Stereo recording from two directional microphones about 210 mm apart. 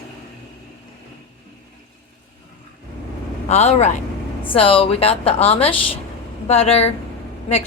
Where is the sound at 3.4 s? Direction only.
30° left (ahead or behind).